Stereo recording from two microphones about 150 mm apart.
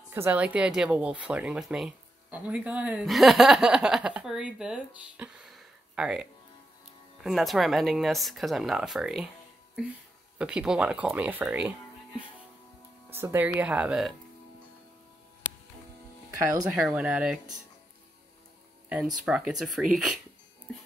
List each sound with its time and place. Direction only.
0.1 s speech: 15° right (ahead or behind)
10.3 s speech: 5° right (ahead or behind)
13.1 s speech: 15° right (ahead or behind)
16.7 s speech: 5° right (ahead or behind)
18.9 s speech: 5° right (ahead or behind)